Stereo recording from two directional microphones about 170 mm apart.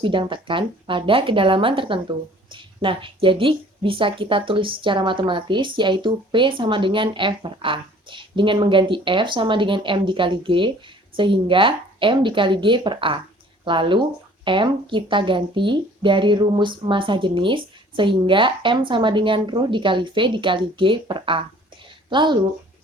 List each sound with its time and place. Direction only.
0.0 s speech: 30° right (ahead or behind)